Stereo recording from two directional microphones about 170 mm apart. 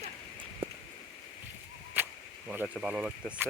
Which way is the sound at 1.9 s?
10° right (ahead or behind).